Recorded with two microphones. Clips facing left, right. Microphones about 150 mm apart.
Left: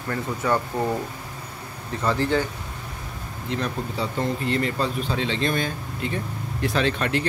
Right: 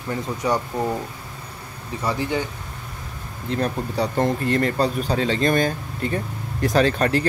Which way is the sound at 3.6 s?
50° right (ahead or behind).